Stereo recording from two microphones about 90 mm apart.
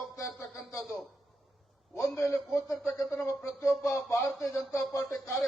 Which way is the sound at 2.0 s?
35° left (ahead or behind).